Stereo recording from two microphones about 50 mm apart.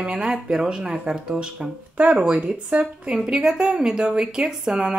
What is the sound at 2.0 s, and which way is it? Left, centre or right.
Speech, right.